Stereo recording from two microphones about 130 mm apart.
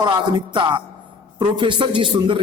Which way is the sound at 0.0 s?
35° right (ahead or behind).